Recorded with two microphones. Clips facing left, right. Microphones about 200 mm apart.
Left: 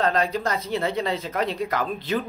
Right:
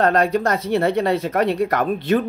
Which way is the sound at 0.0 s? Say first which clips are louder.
Right 6 dB; 60° right (ahead or behind).